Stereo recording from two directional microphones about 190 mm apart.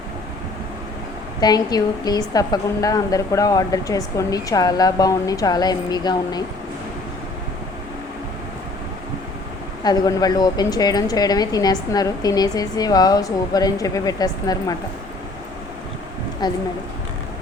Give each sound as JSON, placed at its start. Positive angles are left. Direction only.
{"t": 1.4, "sound": "a woman's voice", "side_deg": 20}
{"t": 9.8, "sound": "a woman's voice", "side_deg": 20}
{"t": 16.4, "sound": "a woman's voice", "side_deg": 20}